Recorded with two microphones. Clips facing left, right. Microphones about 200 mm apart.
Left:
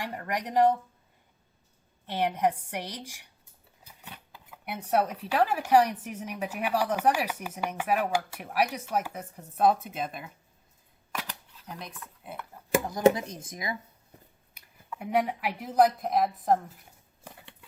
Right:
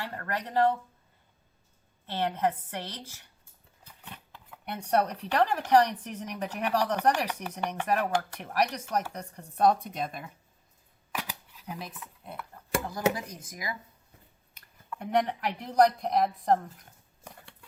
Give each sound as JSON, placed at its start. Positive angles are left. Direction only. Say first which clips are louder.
{"t": 0.0, "sound": "speech", "louder": "left 2 dB", "side_deg": 15}
{"t": 2.0, "sound": "speech", "louder": "left 2 dB", "side_deg": 15}
{"t": 11.1, "sound": "camera", "louder": "right 1 dB", "side_deg": -5}
{"t": 12.8, "sound": "speech", "louder": "left 7 dB", "side_deg": 20}
{"t": 14.5, "sound": "a woman's voice", "louder": "even", "side_deg": 10}